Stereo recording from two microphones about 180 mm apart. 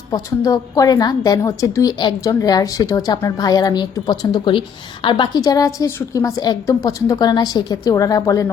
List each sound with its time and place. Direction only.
0.1 s a woman's voice: 20° left (ahead or behind)